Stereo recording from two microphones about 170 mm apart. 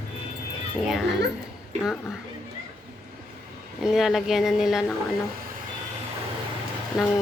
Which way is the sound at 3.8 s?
Centre (ahead or behind).